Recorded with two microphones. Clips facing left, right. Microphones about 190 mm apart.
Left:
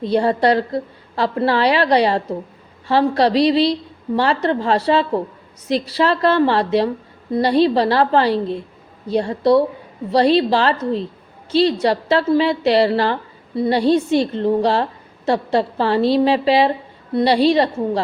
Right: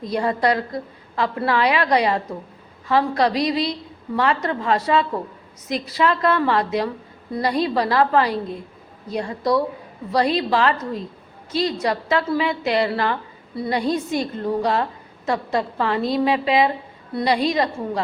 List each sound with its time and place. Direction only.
0.0 s a woman's voice: 30° left (ahead or behind)